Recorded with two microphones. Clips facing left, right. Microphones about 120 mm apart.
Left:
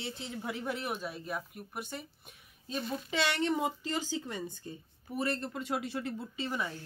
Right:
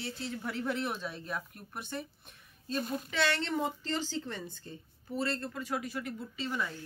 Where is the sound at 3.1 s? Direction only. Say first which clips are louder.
Left 2 dB; 15° left (ahead or behind).